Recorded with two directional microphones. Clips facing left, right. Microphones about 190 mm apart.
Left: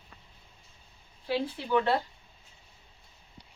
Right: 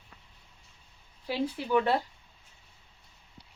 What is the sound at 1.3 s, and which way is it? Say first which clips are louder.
Speech: even; 15° right (ahead or behind).